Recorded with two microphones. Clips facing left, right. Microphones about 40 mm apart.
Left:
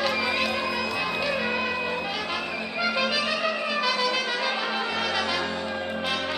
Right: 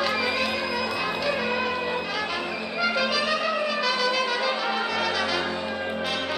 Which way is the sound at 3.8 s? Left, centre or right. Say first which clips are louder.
Even; centre.